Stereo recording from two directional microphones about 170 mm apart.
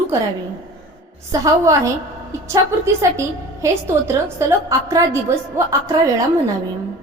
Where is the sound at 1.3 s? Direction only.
20° right (ahead or behind).